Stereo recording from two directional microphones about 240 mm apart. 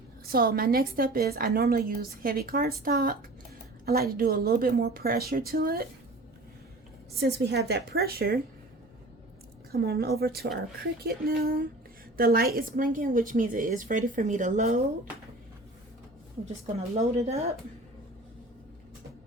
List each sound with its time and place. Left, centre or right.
0.3 s a woman's voice: right
7.2 s a woman's voice: right
9.7 s a woman's voice: right
16.7 s speech: right